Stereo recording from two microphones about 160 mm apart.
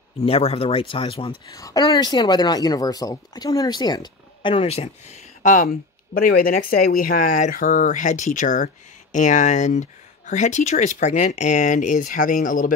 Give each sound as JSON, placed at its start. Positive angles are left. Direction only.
{"t": 0.2, "sound": "speech", "side_deg": 35}
{"t": 1.5, "sound": "speech", "side_deg": 20}